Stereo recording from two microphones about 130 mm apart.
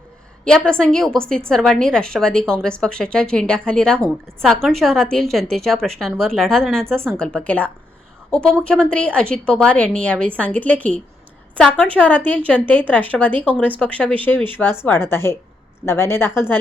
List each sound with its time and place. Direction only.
0.4 s a woman's voice: 5° left (ahead or behind)